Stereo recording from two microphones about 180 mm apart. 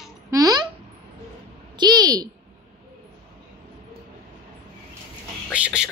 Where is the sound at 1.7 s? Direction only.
25° right (ahead or behind).